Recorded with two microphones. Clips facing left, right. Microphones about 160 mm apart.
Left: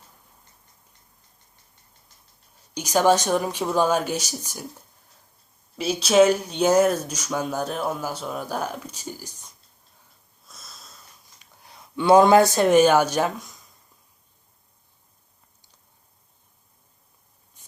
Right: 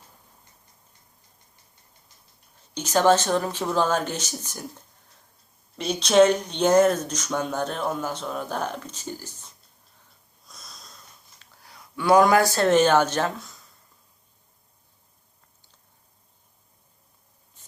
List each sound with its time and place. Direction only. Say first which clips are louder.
2.7 s speech: even; 10° left (ahead or behind)
5.7 s speech: left 1 dB; 5° left (ahead or behind)
10.4 s wheeze: even; centre (ahead or behind)
11.3 s speech: left 2 dB; 20° left (ahead or behind)
17.6 s spray: left 1 dB; 15° left (ahead or behind)